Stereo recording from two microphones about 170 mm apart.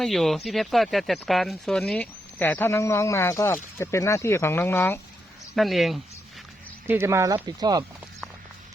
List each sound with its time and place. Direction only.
0.0 s speech: centre (ahead or behind)
5.5 s speech: centre (ahead or behind)
6.8 s speech: 15° right (ahead or behind)